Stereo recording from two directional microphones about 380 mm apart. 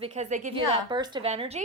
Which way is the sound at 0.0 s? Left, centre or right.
Centre.